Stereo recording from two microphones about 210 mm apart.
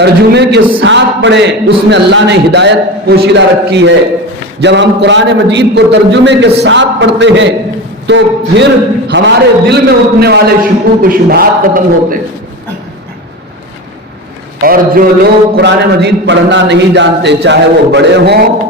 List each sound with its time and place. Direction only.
0.0 s a man's voice: 50° right (ahead or behind)
14.6 s a man's voice: 45° right (ahead or behind)